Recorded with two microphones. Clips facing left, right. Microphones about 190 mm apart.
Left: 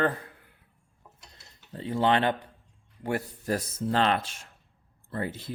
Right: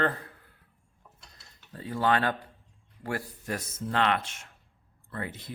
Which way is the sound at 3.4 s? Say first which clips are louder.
Left 5 dB; 35° left (ahead or behind).